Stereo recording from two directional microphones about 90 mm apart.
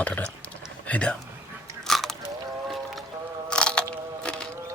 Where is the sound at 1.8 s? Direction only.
5° left (ahead or behind).